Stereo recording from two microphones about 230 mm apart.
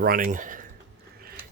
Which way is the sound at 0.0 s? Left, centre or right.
Right.